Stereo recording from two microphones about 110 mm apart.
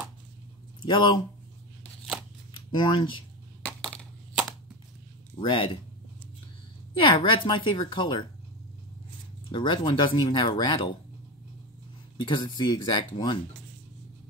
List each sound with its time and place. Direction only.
0.8 s speech: 45° left (ahead or behind)
2.5 s speech: 45° left (ahead or behind)
5.3 s speech: 50° left (ahead or behind)
7.1 s speech: 50° left (ahead or behind)
9.5 s speech: 50° left (ahead or behind)
12.2 s speech: 45° left (ahead or behind)